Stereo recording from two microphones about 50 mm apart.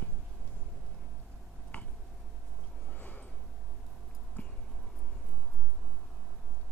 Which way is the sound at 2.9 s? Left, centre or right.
Left.